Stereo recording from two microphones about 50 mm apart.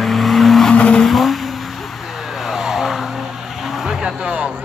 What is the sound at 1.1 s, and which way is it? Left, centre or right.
Vehicle, centre.